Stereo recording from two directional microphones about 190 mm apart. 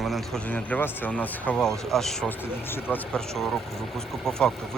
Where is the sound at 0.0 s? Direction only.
Centre (ahead or behind).